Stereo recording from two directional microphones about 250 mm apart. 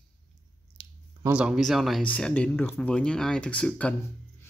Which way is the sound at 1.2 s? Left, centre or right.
Centre.